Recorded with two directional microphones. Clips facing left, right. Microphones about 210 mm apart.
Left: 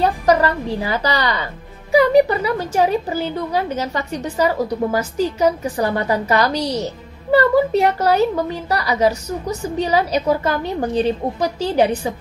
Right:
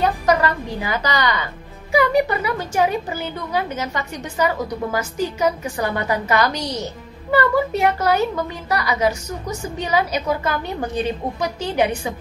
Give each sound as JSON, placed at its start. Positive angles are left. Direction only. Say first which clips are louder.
{"t": 0.0, "sound": "a woman's voice", "louder": "left 2 dB", "side_deg": 35}